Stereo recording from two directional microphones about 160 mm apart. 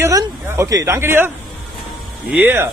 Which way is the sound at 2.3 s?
15° right (ahead or behind).